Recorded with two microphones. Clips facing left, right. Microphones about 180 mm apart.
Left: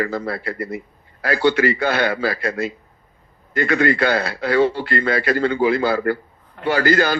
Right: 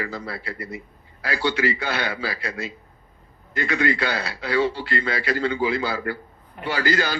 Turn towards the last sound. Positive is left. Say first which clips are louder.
# left 6 dB
turn(degrees=55)  # may be behind; listen again after turning